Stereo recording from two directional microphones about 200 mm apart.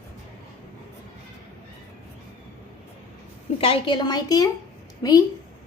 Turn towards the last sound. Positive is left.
turn(degrees=20)  # may be behind; listen again after turning